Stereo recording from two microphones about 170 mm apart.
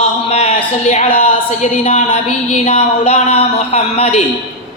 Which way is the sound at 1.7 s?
45° left (ahead or behind).